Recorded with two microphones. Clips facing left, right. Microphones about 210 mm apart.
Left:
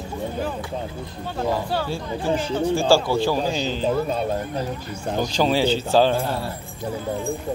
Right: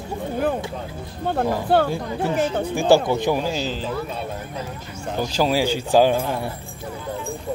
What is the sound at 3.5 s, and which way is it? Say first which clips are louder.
Speech: left 2 dB; 5° right (ahead or behind).